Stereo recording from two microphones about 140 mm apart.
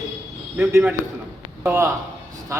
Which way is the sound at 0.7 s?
15° right (ahead or behind).